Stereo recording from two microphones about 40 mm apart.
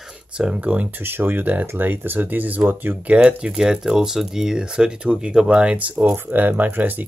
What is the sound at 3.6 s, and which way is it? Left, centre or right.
Speech, centre.